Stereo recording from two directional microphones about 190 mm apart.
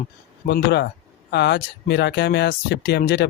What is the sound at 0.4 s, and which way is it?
Speech, 60° left (ahead or behind).